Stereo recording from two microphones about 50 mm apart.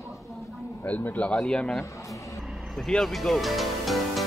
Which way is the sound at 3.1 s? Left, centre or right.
Centre.